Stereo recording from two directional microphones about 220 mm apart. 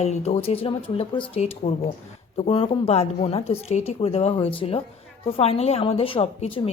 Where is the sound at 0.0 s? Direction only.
30° left (ahead or behind).